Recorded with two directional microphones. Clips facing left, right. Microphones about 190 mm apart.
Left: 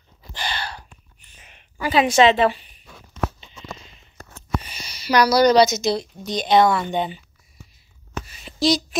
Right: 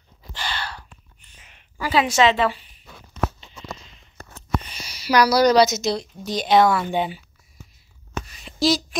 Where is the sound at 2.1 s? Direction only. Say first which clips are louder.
Left 4 dB; 20° left (ahead or behind).